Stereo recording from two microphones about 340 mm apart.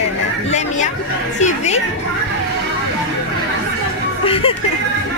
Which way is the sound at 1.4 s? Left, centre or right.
Centre.